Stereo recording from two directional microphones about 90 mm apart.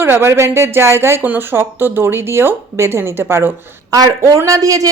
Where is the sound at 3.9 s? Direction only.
40° right (ahead or behind).